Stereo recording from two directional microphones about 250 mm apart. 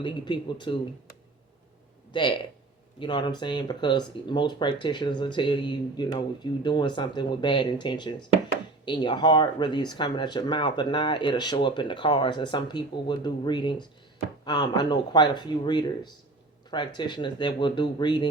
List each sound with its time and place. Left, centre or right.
0.0 s speech: centre
2.1 s speech: centre